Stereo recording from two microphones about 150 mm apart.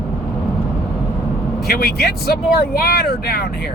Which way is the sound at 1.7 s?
90° left.